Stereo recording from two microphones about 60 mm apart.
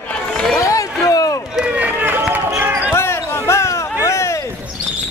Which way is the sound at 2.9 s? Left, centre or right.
Left.